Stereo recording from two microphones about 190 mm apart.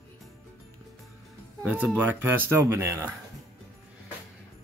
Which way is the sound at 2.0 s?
10° right (ahead or behind).